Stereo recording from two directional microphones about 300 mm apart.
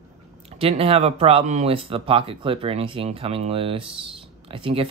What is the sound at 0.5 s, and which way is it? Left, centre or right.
Speech, centre.